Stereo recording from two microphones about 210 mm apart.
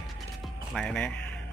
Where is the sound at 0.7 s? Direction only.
5° left (ahead or behind).